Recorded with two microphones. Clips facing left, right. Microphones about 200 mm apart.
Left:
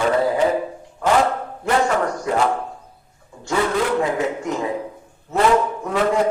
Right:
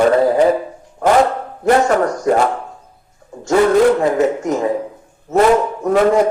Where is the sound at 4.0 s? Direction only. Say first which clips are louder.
Right 6 dB; 45° right (ahead or behind).